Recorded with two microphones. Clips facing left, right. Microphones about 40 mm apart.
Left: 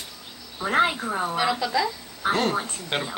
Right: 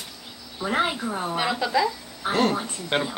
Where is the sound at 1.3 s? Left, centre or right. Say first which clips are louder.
Right 2 dB; centre.